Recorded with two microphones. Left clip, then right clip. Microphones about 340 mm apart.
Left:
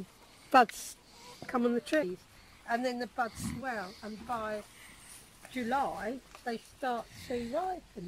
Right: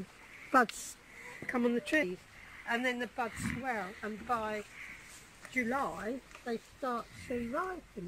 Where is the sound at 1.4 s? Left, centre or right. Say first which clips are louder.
Left 1 dB; left.